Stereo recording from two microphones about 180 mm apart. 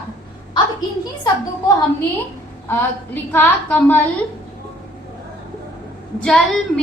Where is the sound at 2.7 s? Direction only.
10° left (ahead or behind).